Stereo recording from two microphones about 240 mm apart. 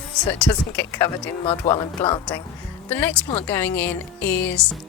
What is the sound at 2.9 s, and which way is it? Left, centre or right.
Speech, centre.